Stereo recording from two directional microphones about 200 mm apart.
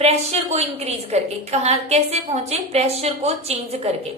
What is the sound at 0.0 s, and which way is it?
A woman's voice, 30° right (ahead or behind).